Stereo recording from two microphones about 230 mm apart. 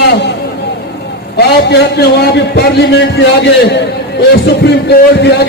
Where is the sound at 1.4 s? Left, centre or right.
Left.